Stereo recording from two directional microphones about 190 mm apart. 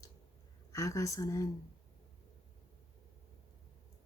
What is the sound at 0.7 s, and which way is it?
Speech, 15° left (ahead or behind).